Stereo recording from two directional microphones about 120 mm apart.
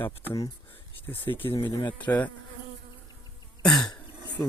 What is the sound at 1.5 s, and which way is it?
Speech, 40° left (ahead or behind).